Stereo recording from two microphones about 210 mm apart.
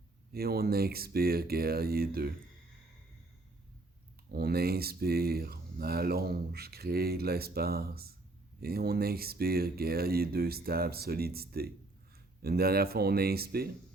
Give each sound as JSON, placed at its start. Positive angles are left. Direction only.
{"t": 0.3, "sound": "speech", "side_deg": -45}
{"t": 4.3, "sound": "speech", "side_deg": -45}